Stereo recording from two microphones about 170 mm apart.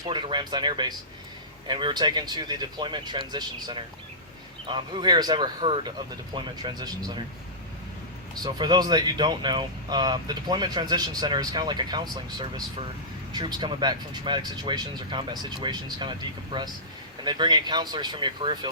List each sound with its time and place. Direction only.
0.0 s speech: 25° right (ahead or behind)
8.4 s speech: 25° right (ahead or behind)